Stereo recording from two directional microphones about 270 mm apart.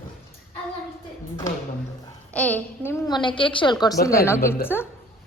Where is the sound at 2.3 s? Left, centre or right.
Centre.